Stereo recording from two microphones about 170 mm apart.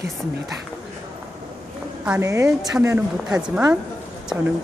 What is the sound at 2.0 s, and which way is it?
Speech, 15° right (ahead or behind).